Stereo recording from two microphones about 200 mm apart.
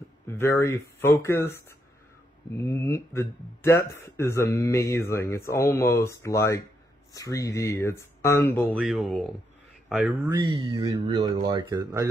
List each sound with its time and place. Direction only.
0.3 s speech: 15° left (ahead or behind)
8.7 s speech: centre (ahead or behind)
10.3 s speech: 20° right (ahead or behind)